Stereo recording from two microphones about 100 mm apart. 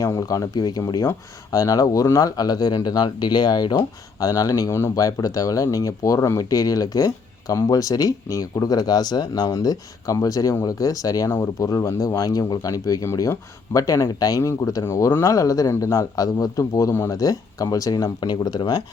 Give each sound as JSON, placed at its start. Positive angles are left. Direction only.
{"t": 0.0, "sound": "speech", "side_deg": 35}